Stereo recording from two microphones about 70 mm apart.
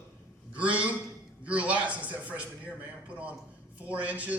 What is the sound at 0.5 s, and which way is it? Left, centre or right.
A man's voice, centre.